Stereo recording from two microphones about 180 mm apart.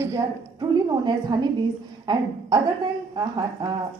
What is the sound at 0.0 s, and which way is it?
A woman's voice, 20° right (ahead or behind).